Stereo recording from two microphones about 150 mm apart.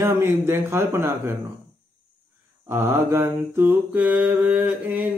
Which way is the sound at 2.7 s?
15° right (ahead or behind).